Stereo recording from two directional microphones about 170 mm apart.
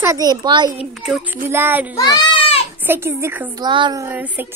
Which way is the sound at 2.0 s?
25° left (ahead or behind).